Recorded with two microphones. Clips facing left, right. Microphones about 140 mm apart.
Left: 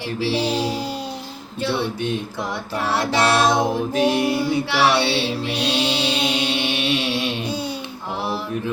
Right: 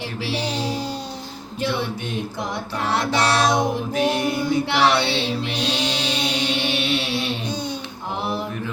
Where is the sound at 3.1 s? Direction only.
25° left (ahead or behind).